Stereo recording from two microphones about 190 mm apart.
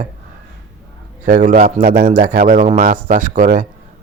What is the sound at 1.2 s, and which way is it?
Speech, 45° right (ahead or behind).